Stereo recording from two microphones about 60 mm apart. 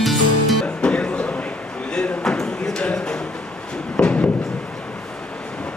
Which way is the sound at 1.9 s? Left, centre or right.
Centre.